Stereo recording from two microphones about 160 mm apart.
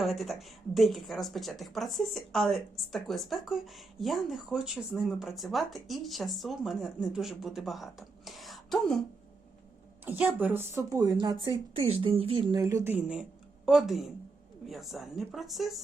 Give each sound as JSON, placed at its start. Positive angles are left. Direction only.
{"t": 0.0, "sound": "speech", "side_deg": 0}
{"t": 10.1, "sound": "a woman's voice", "side_deg": -10}
{"t": 11.7, "sound": "speech", "side_deg": -35}
{"t": 12.6, "sound": "a woman's voice", "side_deg": -15}